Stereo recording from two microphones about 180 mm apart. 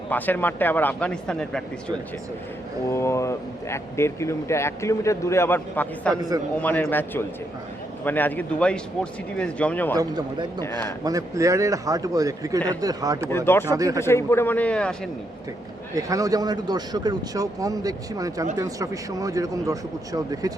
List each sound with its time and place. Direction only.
0.1 s speech: 10° left (ahead or behind)
2.9 s speech: 15° left (ahead or behind)
10.0 s speech: 25° right (ahead or behind)
10.6 s speech: 15° left (ahead or behind)
11.0 s speech: 20° right (ahead or behind)
13.3 s speech: 10° left (ahead or behind)
13.7 s speech: 20° right (ahead or behind)
14.0 s speech: 15° left (ahead or behind)
16.0 s speech: 20° right (ahead or behind)